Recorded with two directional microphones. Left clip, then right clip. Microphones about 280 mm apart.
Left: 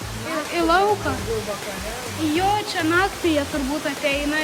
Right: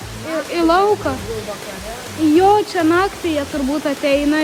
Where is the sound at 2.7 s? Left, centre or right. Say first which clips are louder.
Right 4 dB; centre.